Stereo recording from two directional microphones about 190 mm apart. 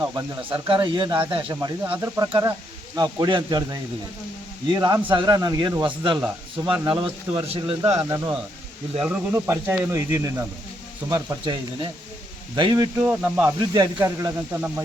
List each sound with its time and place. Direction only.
0.7 s speech: 25° right (ahead or behind)
1.8 s speech: 10° right (ahead or behind); by 7.8 s 30° right (ahead or behind)
7.9 s speech: 15° right (ahead or behind)
13.0 s speech: 5° right (ahead or behind)
13.6 s speech: 20° right (ahead or behind)